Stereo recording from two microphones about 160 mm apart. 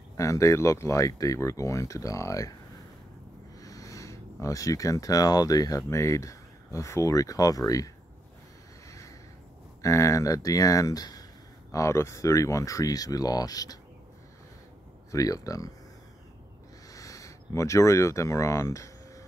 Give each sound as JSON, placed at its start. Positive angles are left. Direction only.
{"t": 0.2, "sound": "speech", "side_deg": 20}
{"t": 3.6, "sound": "speech", "side_deg": 20}
{"t": 9.8, "sound": "speech", "side_deg": 20}
{"t": 15.0, "sound": "speech", "side_deg": 20}
{"t": 16.9, "sound": "speech", "side_deg": 20}